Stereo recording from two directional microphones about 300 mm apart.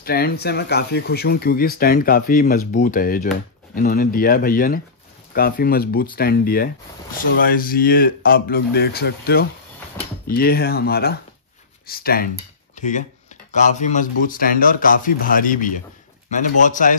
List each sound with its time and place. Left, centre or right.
0.0 s speech: left
12.7 s a sound: left
13.5 s a man's voice: left